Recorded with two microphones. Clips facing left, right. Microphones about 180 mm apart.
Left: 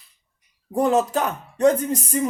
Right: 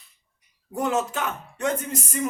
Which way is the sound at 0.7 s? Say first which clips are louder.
Left 6 dB; 35° left (ahead or behind).